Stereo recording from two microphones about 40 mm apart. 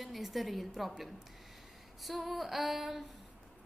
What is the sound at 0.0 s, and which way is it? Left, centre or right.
A woman's voice, centre.